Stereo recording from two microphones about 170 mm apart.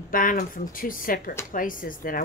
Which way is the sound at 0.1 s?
55° left (ahead or behind).